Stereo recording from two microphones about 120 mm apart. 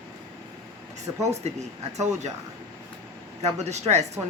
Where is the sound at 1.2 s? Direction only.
65° right (ahead or behind).